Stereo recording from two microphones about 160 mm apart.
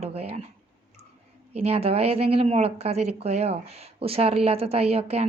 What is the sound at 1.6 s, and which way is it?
Speech, 40° right (ahead or behind).